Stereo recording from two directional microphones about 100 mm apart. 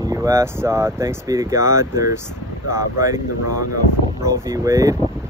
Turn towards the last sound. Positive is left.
turn(degrees=-35)  # may be behind; listen again after turning